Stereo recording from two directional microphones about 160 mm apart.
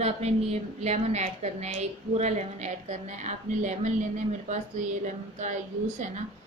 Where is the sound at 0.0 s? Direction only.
40° right (ahead or behind).